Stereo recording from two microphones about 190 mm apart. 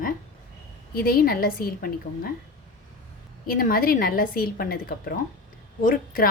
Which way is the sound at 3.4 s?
50° left (ahead or behind).